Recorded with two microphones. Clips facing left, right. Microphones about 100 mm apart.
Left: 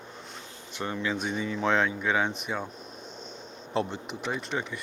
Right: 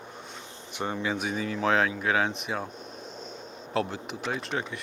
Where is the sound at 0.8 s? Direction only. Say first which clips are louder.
Right 2 dB; 20° right (ahead or behind).